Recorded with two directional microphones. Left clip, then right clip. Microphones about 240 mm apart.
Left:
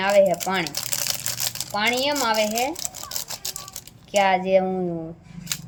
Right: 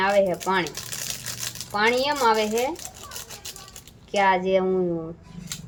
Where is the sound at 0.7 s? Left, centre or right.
Left.